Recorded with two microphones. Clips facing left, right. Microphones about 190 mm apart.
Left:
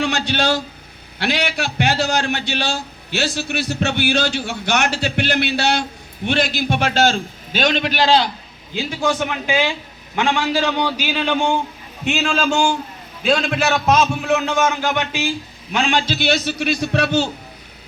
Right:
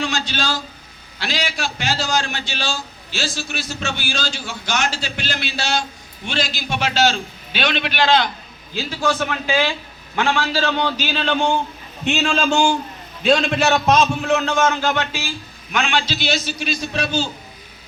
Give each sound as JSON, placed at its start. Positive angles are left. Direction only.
{"t": 0.0, "sound": "a man's voice", "side_deg": 60}
{"t": 8.7, "sound": "a man's voice", "side_deg": 15}
{"t": 15.7, "sound": "a man's voice", "side_deg": 30}
{"t": 16.0, "sound": "a man's voice", "side_deg": 55}